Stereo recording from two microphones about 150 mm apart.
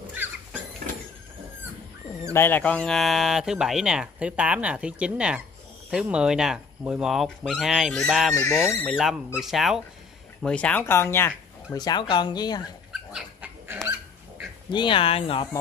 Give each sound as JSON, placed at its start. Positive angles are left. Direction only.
{"t": 2.3, "sound": "speech", "side_deg": 15}
{"t": 8.8, "sound": "speech", "side_deg": -5}
{"t": 11.8, "sound": "speech", "side_deg": 30}
{"t": 13.1, "sound": "dog", "side_deg": -10}
{"t": 14.7, "sound": "speech", "side_deg": 35}